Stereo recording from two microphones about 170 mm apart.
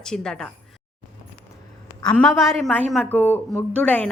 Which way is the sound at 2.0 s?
5° left (ahead or behind).